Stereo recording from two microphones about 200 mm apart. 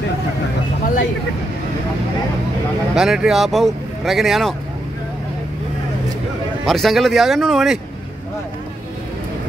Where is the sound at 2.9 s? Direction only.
5° right (ahead or behind).